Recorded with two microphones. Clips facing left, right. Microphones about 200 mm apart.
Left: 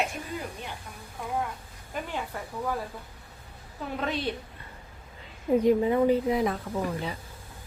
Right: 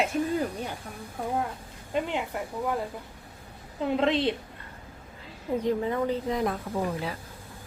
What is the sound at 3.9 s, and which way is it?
Speech, 25° right (ahead or behind).